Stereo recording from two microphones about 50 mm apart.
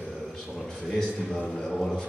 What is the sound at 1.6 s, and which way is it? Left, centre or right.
Speech, centre.